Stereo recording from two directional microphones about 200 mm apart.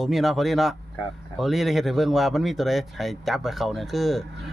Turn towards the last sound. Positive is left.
turn(degrees=0)  # may be behind; listen again after turning